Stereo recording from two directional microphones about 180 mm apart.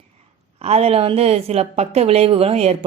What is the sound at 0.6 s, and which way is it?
A woman's voice, 35° right (ahead or behind).